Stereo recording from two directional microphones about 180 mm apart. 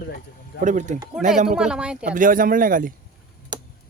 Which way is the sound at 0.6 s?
45° right (ahead or behind).